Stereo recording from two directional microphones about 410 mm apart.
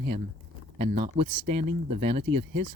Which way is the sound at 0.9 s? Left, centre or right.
Centre.